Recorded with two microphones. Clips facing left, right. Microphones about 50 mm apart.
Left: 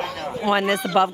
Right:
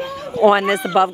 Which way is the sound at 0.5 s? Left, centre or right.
Centre.